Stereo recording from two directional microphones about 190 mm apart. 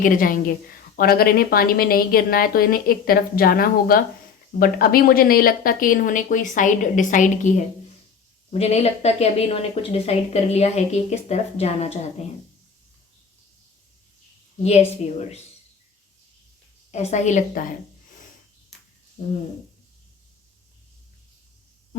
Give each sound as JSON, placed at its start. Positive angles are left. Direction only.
{"t": 0.0, "sound": "a woman's voice", "side_deg": 45}
{"t": 14.6, "sound": "a woman's voice", "side_deg": 35}
{"t": 16.9, "sound": "a woman's voice", "side_deg": 35}